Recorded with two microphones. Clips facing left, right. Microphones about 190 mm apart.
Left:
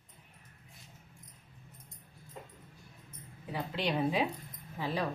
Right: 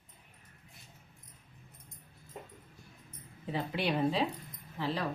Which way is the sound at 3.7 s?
5° right (ahead or behind).